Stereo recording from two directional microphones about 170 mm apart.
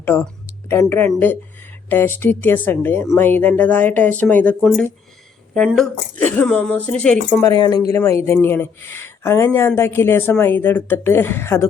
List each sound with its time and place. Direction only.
0.0 s speech: 15° left (ahead or behind)
5.5 s speech: centre (ahead or behind)
7.4 s speech: 25° left (ahead or behind)